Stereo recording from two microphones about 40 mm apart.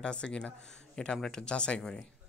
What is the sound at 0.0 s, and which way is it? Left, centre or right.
Speech, left.